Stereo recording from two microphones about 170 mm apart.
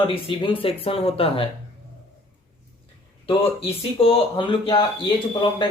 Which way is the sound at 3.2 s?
30° left (ahead or behind).